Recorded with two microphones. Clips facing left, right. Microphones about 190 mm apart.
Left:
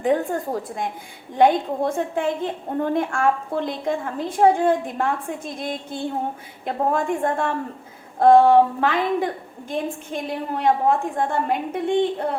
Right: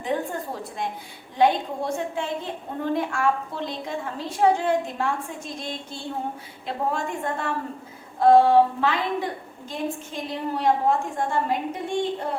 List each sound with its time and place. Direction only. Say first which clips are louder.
0.0 s a woman's voice: left 6 dB; 50° left (ahead or behind)